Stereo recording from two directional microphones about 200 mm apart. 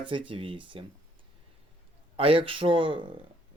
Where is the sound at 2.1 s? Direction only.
25° right (ahead or behind).